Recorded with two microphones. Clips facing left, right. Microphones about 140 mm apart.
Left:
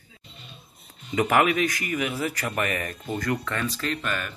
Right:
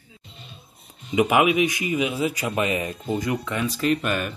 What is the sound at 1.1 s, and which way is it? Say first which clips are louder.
Speech: right 3 dB; 15° right (ahead or behind).